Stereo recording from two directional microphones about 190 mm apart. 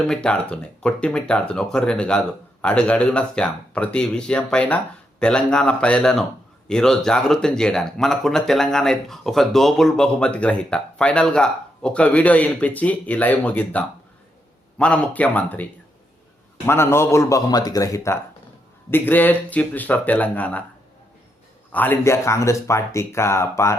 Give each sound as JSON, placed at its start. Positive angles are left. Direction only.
{"t": 0.1, "sound": "speech", "side_deg": 5}
{"t": 16.6, "sound": "speech", "side_deg": 15}
{"t": 21.7, "sound": "speech", "side_deg": 10}